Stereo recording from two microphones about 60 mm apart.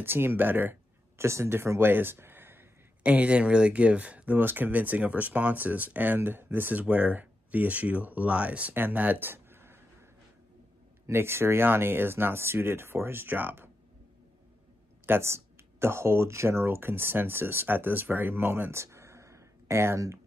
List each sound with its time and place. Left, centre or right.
0.0 s speech: right
1.2 s speech: right
3.0 s speech: right
11.1 s speech: right
15.0 s speech: right